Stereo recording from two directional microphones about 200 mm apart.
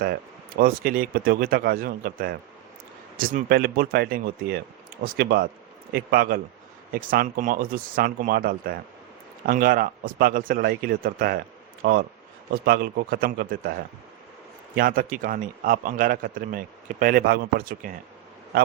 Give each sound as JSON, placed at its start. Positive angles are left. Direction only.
{"t": 0.0, "sound": "a man's voice", "side_deg": -45}
{"t": 14.8, "sound": "a man's voice", "side_deg": -45}